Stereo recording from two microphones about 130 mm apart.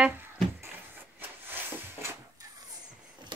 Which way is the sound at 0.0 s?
15° right (ahead or behind).